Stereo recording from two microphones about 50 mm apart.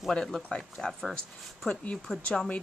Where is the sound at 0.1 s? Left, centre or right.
Centre.